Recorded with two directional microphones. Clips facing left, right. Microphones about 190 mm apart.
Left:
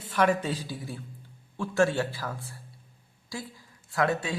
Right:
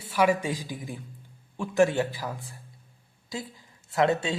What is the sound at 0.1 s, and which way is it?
A man's voice, 10° right (ahead or behind).